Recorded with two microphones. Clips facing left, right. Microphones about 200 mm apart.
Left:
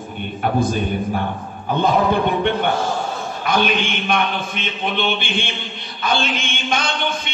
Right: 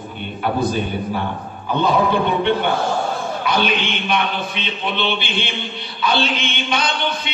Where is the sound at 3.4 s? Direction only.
50° left (ahead or behind).